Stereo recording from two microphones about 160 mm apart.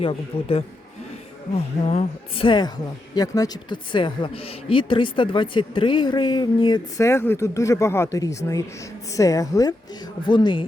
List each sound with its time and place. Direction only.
0.0 s a woman's voice: 35° left (ahead or behind)